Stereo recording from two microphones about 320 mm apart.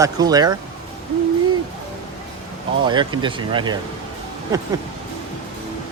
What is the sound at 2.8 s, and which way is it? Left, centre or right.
Speech, centre.